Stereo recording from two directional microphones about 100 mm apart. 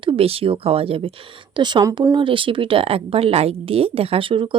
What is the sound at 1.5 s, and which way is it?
Speech, 50° right (ahead or behind).